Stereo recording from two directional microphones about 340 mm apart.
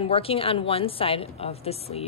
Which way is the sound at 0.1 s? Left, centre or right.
Centre.